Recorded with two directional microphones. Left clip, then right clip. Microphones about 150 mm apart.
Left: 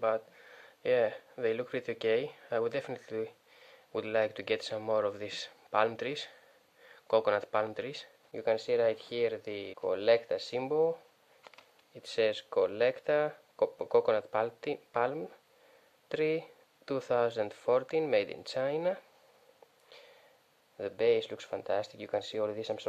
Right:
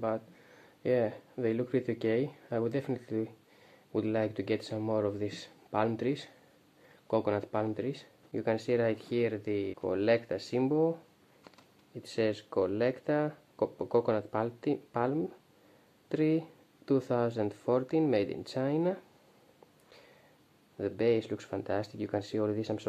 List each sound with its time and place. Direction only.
0.0 s speech: 35° left (ahead or behind)
20.7 s speech: 30° left (ahead or behind)